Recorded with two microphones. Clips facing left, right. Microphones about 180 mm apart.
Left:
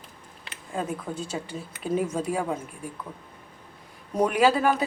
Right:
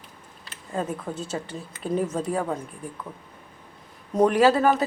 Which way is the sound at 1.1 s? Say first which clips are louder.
Right 1 dB; 5° right (ahead or behind).